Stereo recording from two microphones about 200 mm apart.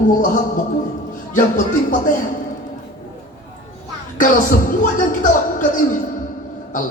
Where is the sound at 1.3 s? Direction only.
40° left (ahead or behind).